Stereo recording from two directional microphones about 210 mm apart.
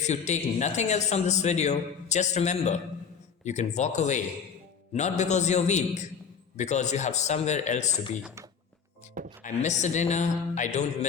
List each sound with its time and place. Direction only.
0.0 s speech: 35° left (ahead or behind)
9.4 s speech: 35° left (ahead or behind)